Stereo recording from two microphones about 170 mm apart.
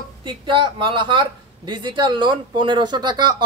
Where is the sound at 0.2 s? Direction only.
30° right (ahead or behind).